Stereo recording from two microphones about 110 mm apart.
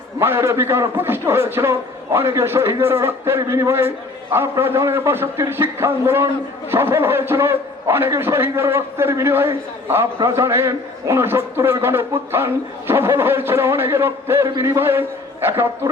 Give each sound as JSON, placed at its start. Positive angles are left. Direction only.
{"t": 0.2, "sound": "a man's voice", "side_deg": -20}